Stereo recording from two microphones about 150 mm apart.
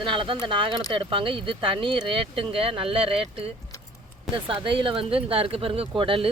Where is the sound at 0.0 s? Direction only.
35° right (ahead or behind).